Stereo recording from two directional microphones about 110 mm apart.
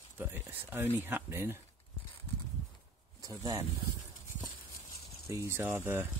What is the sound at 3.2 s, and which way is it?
Speech, 35° right (ahead or behind).